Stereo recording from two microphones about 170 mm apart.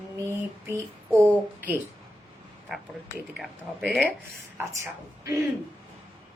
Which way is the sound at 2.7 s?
5° right (ahead or behind).